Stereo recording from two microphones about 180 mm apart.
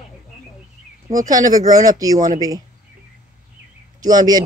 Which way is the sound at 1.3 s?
20° right (ahead or behind).